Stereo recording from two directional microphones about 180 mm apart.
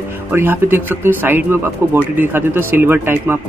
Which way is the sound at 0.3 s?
10° right (ahead or behind).